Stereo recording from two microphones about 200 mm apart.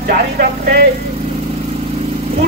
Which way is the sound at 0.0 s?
45° right (ahead or behind).